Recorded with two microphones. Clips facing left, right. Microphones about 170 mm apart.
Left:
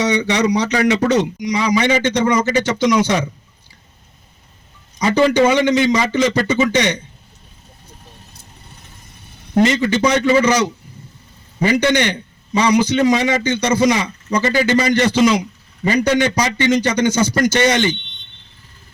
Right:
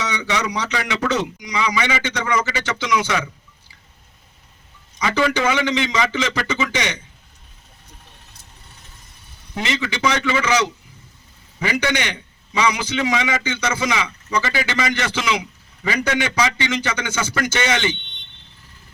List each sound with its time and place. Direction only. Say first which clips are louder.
0.0 s a man's voice: left 8 dB; 40° left (ahead or behind)
4.9 s a man's voice: left 7 dB; 35° left (ahead or behind)
9.6 s a man's voice: left 10 dB; 45° left (ahead or behind)
11.9 s a man's voice: left 7 dB; 40° left (ahead or behind)